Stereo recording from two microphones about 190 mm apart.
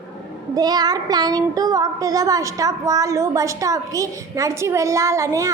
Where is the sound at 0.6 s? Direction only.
20° right (ahead or behind).